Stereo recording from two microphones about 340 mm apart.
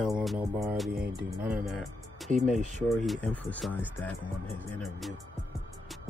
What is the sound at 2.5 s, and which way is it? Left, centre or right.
Speech, right.